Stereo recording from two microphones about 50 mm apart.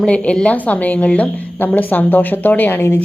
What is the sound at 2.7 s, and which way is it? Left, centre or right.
Speech, left.